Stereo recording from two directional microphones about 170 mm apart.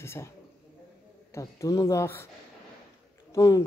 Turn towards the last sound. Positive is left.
turn(degrees=20)  # may be behind; listen again after turning